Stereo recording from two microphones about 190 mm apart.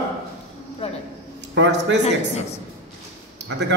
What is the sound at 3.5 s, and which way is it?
Speech, 70° right (ahead or behind).